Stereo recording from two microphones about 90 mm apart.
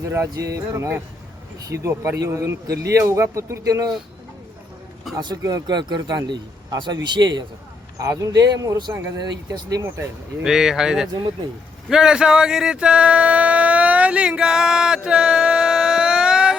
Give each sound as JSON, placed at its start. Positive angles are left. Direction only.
{"t": 0.0, "sound": "speech", "side_deg": -35}
{"t": 5.1, "sound": "speech", "side_deg": -45}
{"t": 7.9, "sound": "speech", "side_deg": -40}
{"t": 9.8, "sound": "speech", "side_deg": -25}
{"t": 10.4, "sound": "speech", "side_deg": -5}